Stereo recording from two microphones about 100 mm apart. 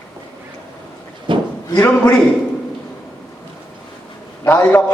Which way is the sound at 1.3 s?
55° right (ahead or behind).